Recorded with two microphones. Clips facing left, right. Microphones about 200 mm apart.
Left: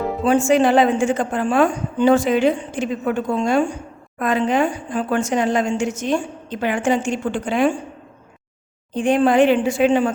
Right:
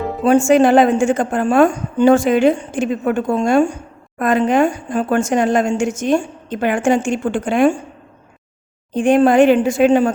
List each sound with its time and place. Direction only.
0.3 s a woman's voice: 45° right (ahead or behind)
9.0 s a woman's voice: 45° right (ahead or behind)